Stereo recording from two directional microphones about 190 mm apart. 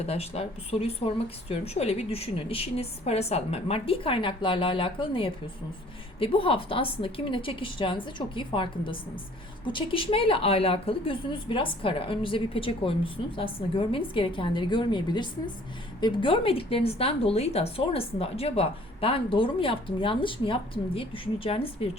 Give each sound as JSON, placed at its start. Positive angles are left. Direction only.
{"t": 0.0, "sound": "speech", "side_deg": 30}